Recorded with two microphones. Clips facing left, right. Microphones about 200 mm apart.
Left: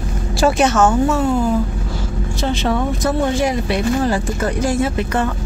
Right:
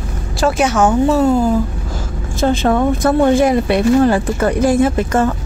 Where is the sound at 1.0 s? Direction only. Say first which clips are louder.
Right 4 dB; 40° right (ahead or behind).